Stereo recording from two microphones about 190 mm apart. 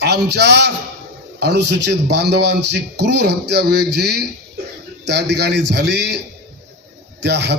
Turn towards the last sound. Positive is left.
turn(degrees=-60)  # may be behind; listen again after turning